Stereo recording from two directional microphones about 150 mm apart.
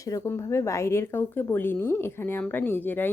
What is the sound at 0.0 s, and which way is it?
Speech, 20° left (ahead or behind).